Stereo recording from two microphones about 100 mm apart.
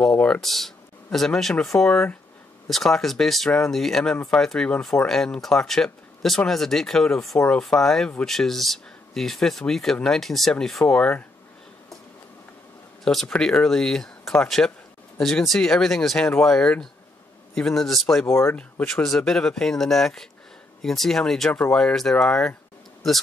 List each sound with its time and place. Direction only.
0.0 s speech: 10° left (ahead or behind)
13.0 s speech: 5° left (ahead or behind)
18.2 s speech: 25° left (ahead or behind)
18.6 s speech: 10° left (ahead or behind)